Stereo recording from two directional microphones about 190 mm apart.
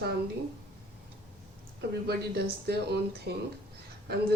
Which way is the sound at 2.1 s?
60° right (ahead or behind).